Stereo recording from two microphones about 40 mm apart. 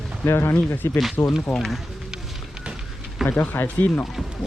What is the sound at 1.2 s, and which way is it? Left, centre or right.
Speech, left.